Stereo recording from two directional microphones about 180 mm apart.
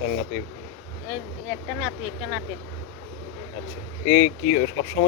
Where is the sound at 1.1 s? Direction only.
Centre (ahead or behind).